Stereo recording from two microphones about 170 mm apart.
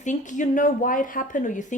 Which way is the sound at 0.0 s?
45° left (ahead or behind).